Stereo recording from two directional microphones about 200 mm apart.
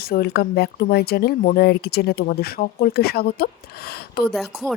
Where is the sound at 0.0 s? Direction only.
50° left (ahead or behind).